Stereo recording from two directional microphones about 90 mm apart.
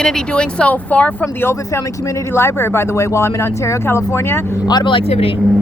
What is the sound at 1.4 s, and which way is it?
Speech, 30° left (ahead or behind).